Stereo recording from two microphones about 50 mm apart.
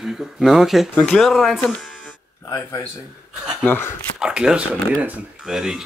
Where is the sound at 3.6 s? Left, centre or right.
Left.